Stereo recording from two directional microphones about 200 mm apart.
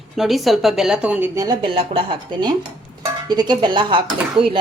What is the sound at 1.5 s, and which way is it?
Speech, 25° right (ahead or behind).